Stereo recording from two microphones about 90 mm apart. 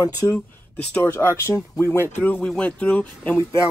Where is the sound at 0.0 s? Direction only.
40° left (ahead or behind).